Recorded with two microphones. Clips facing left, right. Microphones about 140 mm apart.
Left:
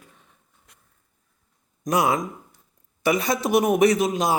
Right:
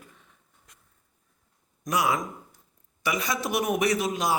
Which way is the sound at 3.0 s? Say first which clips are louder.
Left 7 dB; 30° left (ahead or behind).